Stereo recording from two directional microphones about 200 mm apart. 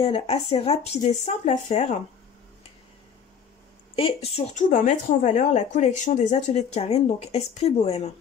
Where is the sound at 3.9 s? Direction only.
30° left (ahead or behind).